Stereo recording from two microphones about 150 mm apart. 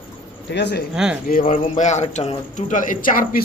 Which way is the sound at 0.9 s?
5° right (ahead or behind).